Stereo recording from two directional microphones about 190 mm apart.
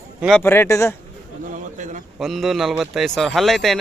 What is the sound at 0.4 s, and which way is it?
Speech, 10° left (ahead or behind).